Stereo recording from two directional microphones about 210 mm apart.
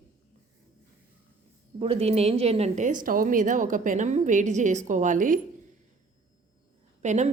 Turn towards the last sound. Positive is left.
turn(degrees=-35)  # may be behind; listen again after turning